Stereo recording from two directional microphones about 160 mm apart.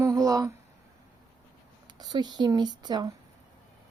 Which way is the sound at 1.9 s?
25° right (ahead or behind).